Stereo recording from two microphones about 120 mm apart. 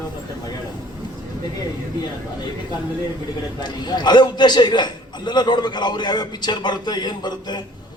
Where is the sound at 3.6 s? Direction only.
35° left (ahead or behind).